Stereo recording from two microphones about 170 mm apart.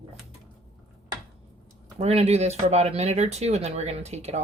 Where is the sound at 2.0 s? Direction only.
40° right (ahead or behind).